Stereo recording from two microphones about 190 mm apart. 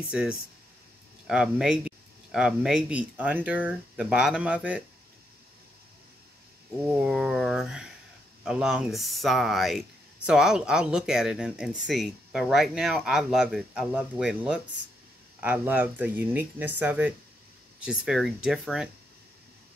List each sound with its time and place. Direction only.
0.1 s speech: 5° right (ahead or behind)
6.9 s speech: 5° right (ahead or behind)